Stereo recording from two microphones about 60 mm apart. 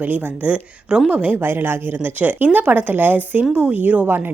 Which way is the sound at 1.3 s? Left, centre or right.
Right.